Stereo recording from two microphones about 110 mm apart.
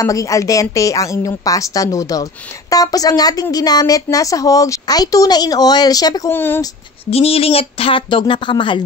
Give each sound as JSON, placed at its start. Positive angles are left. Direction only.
{"t": 0.0, "sound": "speech", "side_deg": 30}
{"t": 6.3, "sound": "speech", "side_deg": 20}
{"t": 7.1, "sound": "speech", "side_deg": 65}